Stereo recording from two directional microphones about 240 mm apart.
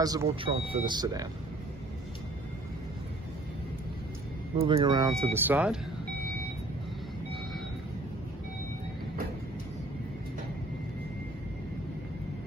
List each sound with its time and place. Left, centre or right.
0.0 s speech: centre
4.6 s speech: right; by 5.8 s centre